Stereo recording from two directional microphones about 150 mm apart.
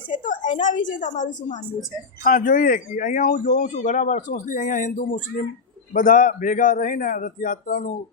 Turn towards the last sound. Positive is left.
turn(degrees=60)  # may be behind; listen again after turning